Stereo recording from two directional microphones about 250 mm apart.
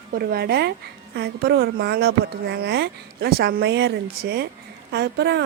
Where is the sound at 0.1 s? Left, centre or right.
Right.